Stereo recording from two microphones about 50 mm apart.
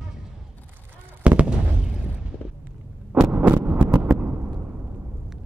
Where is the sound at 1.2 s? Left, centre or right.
Right.